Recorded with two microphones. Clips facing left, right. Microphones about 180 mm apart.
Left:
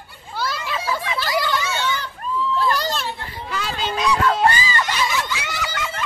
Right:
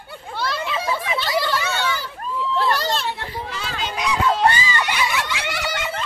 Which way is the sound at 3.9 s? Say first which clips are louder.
Left 2 dB; 20° right (ahead or behind).